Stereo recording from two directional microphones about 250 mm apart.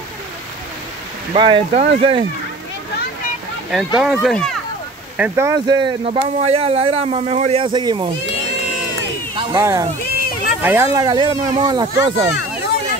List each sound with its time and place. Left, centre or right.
1.3 s speech: right
3.7 s speech: centre
9.3 s speech: centre